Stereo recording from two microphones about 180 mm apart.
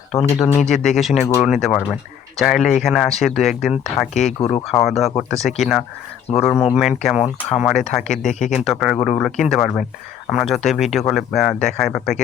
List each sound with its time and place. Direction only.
0.1 s speech: 35° left (ahead or behind)
0.3 s speech: 5° left (ahead or behind)
4.4 s speech: 35° left (ahead or behind)
4.8 s speech: centre (ahead or behind)
8.2 s speech: 40° left (ahead or behind)
8.6 s speech: centre (ahead or behind)